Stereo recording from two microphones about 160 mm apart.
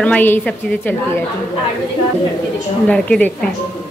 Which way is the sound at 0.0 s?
10° left (ahead or behind).